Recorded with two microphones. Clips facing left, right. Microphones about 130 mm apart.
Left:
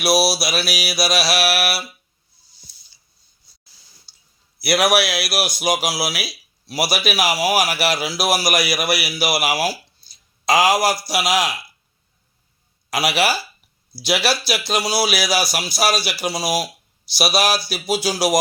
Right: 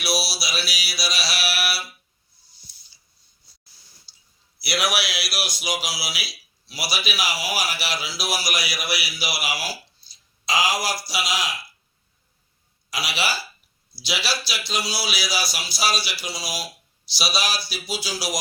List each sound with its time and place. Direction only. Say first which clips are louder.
0.0 s speech: left 9 dB; 55° left (ahead or behind)
3.7 s drip: left 1 dB; 90° left
4.6 s speech: left 8 dB; 55° left (ahead or behind)
12.9 s speech: left 8 dB; 55° left (ahead or behind)